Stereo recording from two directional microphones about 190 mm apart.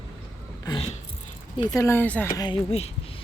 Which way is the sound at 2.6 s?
35° left (ahead or behind).